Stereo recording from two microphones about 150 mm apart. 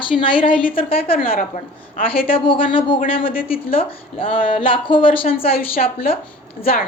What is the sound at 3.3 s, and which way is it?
Speech, 75° left (ahead or behind).